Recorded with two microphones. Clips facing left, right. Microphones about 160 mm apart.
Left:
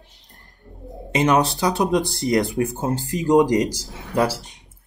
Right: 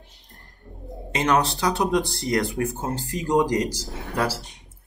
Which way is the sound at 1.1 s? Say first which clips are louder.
Left 3 dB; 15° left (ahead or behind).